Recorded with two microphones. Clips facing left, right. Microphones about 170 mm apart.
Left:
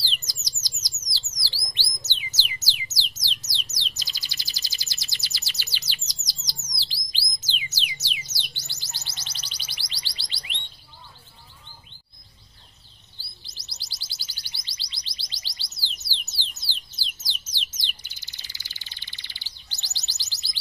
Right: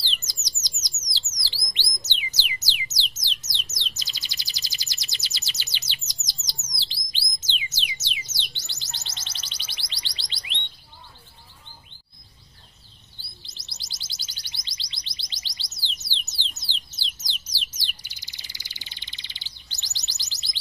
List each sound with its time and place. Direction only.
0.2 s bird: 20° right (ahead or behind)
1.7 s a sound: 20° right (ahead or behind)
3.7 s bird: 20° right (ahead or behind)
8.0 s music: 25° right (ahead or behind)
13.2 s chirp: 25° right (ahead or behind)
16.9 s bird: 20° right (ahead or behind)